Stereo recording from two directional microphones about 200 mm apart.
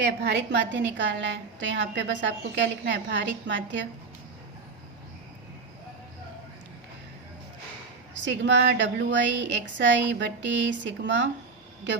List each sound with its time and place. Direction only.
0.2 s a woman's voice: 60° right (ahead or behind)
8.2 s a woman's voice: 65° right (ahead or behind)